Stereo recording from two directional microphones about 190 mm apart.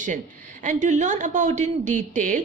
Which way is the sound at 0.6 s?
40° right (ahead or behind).